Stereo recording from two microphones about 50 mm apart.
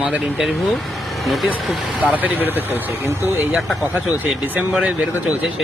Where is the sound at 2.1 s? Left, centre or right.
Right.